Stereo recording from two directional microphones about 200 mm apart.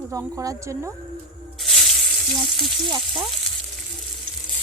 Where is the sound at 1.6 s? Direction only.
Centre (ahead or behind).